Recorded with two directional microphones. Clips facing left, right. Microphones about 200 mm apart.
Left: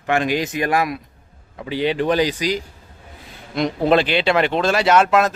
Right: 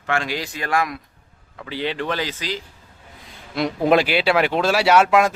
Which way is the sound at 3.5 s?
10° right (ahead or behind).